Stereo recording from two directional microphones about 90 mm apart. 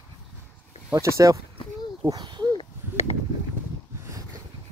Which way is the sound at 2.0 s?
50° right (ahead or behind).